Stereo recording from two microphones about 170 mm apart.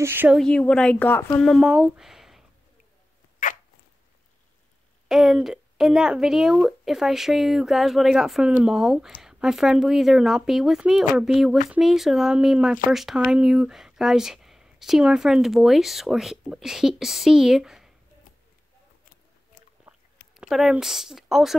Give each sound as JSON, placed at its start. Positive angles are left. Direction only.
{"t": 0.0, "sound": "speech", "side_deg": -10}
{"t": 0.4, "sound": "speech", "side_deg": 5}
{"t": 3.4, "sound": "dog", "side_deg": 50}
{"t": 5.0, "sound": "speech", "side_deg": 0}
{"t": 20.3, "sound": "speech", "side_deg": 0}